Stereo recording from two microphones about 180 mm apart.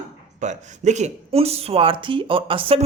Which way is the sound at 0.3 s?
40° right (ahead or behind).